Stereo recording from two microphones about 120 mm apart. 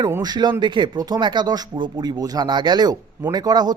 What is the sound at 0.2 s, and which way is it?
Speech, 35° right (ahead or behind).